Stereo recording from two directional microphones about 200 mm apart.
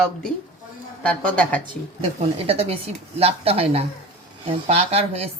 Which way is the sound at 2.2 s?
30° right (ahead or behind).